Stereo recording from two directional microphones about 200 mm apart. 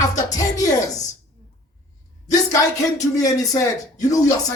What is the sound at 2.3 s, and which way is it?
Speech, 15° left (ahead or behind).